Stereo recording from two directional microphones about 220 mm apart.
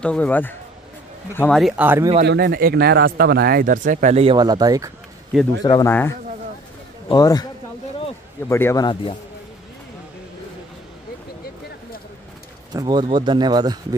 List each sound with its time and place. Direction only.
0.0 s speech: 5° left (ahead or behind)
2.2 s speech: 50° right (ahead or behind); by 4.9 s 15° right (ahead or behind)
5.6 s speech: 15° left (ahead or behind)
7.1 s speech: 15° left (ahead or behind)
8.5 s speech: 10° left (ahead or behind)
12.7 s speech: 20° right (ahead or behind)